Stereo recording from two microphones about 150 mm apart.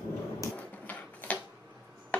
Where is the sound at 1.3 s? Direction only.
10° left (ahead or behind).